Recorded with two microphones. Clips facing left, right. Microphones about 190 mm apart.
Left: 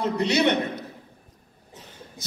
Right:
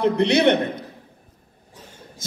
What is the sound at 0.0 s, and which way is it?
Speech, 60° right (ahead or behind).